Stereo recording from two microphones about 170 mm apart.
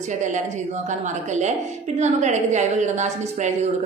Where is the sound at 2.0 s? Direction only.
45° right (ahead or behind).